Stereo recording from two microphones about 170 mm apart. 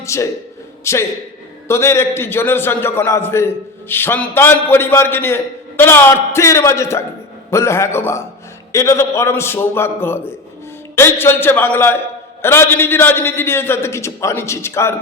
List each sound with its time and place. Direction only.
0.0 s a man's voice: 15° left (ahead or behind)